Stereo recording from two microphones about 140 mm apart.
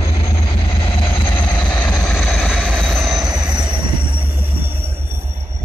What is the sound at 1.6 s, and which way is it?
Vehicle, 10° left (ahead or behind).